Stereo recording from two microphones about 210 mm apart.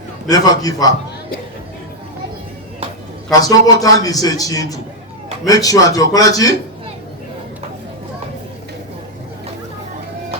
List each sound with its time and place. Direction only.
0.3 s a man's voice: 15° left (ahead or behind)
3.4 s a man's voice: 15° left (ahead or behind)